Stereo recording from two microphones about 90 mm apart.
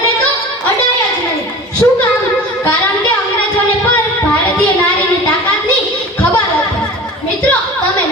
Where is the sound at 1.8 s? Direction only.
20° left (ahead or behind).